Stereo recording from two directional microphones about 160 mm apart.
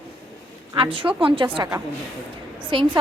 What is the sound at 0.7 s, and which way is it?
A woman's voice, 35° right (ahead or behind).